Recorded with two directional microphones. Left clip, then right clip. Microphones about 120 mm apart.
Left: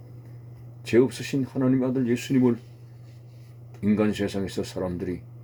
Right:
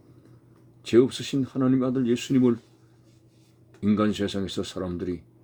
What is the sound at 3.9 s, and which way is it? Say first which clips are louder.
Speech: even; 30° right (ahead or behind).